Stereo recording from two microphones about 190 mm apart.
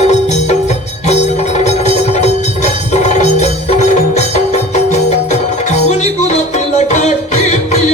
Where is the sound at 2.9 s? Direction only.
35° left (ahead or behind).